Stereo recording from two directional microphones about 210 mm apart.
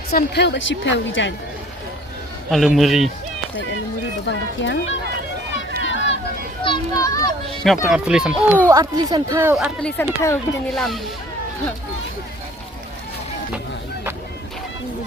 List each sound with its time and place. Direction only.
0.1 s a woman's voice: 50° left (ahead or behind)
2.5 s speech: centre (ahead or behind)
4.3 s a woman's voice: 60° left (ahead or behind)
5.5 s run: 60° left (ahead or behind)
6.7 s a child's voice: 15° left (ahead or behind)
7.9 s speech: 5° right (ahead or behind)
8.6 s speech: 15° right (ahead or behind)
10.0 s a child's voice: 15° left (ahead or behind)
10.3 s speech: centre (ahead or behind)